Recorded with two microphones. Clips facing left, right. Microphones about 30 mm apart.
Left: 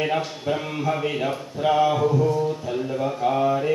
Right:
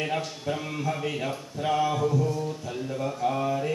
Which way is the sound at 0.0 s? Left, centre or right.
Centre.